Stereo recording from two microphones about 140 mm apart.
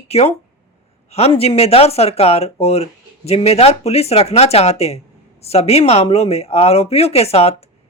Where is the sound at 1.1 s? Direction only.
45° left (ahead or behind).